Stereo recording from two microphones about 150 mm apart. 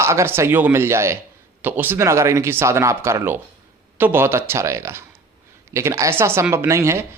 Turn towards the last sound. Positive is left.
turn(degrees=-20)  # may be behind; listen again after turning